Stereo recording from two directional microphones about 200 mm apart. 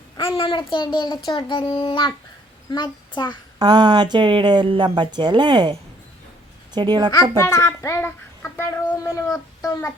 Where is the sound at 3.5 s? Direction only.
20° right (ahead or behind).